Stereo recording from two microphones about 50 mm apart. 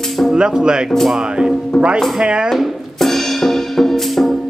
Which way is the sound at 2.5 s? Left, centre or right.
Centre.